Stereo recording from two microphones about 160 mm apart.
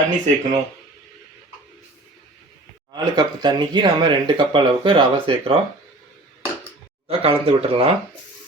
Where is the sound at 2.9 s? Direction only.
25° right (ahead or behind).